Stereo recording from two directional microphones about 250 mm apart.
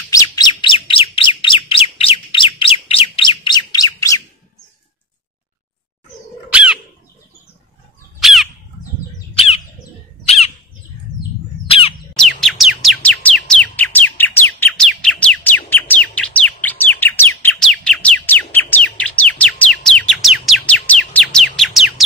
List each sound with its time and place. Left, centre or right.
0.1 s chirp: centre
0.6 s bird: centre
6.5 s bird: centre
8.2 s bird: centre
10.2 s bird: left
11.6 s squawk: left
12.2 s chirp: centre